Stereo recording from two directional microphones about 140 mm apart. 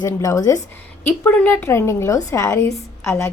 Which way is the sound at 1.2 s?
10° left (ahead or behind).